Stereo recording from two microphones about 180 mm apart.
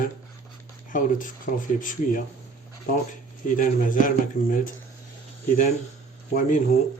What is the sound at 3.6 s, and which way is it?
Speech, 45° left (ahead or behind).